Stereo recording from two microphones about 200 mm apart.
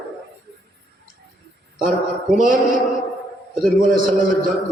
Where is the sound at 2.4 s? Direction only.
45° right (ahead or behind).